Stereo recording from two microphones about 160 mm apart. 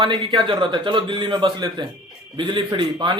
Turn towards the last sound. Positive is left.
turn(degrees=-30)  # may be behind; listen again after turning